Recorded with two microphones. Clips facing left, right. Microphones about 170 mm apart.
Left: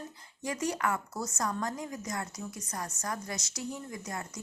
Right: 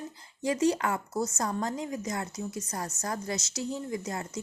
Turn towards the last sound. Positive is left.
turn(degrees=-25)  # may be behind; listen again after turning